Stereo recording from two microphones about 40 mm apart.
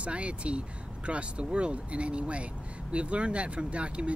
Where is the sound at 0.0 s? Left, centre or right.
Right.